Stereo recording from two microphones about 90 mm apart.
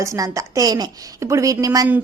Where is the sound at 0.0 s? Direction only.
35° right (ahead or behind).